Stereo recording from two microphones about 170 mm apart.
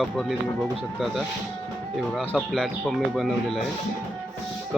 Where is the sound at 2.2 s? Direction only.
5° left (ahead or behind).